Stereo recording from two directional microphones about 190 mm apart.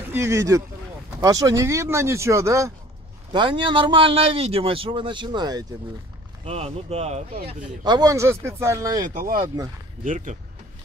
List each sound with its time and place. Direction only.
0.1 s a man's voice: 15° right (ahead or behind)
6.4 s speech: 35° right (ahead or behind)
7.8 s speech: 20° right (ahead or behind)
9.1 s speech: 50° right (ahead or behind)